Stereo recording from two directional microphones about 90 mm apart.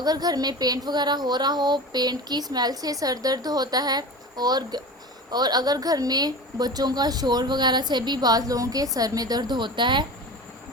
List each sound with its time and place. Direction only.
0.0 s speech: 45° right (ahead or behind)